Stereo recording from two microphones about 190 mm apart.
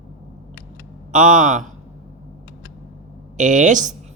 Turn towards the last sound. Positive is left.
turn(degrees=-40)  # may be behind; listen again after turning